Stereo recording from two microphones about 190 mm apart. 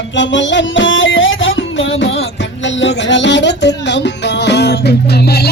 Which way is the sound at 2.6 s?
70° left (ahead or behind).